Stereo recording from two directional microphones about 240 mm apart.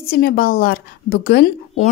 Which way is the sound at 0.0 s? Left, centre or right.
Left.